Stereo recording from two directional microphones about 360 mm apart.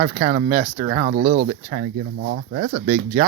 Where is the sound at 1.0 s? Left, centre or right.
Right.